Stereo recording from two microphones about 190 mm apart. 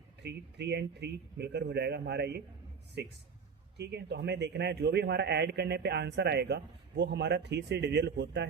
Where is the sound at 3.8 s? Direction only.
60° right (ahead or behind).